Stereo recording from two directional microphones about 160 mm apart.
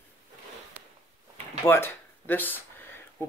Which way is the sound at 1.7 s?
15° left (ahead or behind).